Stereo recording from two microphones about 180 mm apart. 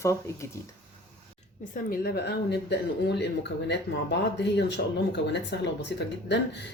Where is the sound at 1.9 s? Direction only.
60° left (ahead or behind).